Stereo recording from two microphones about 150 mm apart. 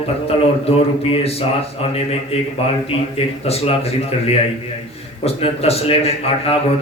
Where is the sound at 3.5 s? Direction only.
40° left (ahead or behind).